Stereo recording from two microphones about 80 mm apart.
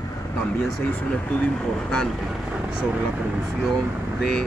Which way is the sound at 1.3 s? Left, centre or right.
Centre.